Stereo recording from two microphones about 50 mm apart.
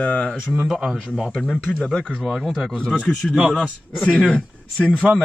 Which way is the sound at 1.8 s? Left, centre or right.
Centre.